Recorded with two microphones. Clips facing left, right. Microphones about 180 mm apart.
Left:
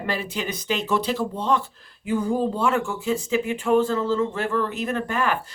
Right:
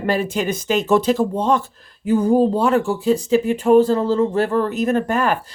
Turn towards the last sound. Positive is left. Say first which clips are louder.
# right 6 dB
turn(degrees=-40)  # may be behind; listen again after turning